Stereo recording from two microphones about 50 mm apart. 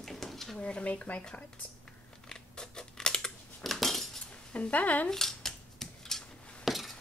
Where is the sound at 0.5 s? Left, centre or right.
Left.